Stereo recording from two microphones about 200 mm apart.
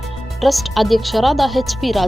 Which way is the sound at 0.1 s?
Centre (ahead or behind).